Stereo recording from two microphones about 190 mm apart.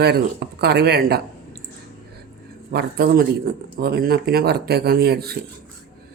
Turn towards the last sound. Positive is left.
turn(degrees=-55)  # may be behind; listen again after turning